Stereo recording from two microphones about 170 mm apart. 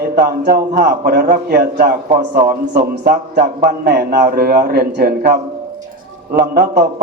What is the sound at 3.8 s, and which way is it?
A man's voice, 65° right (ahead or behind).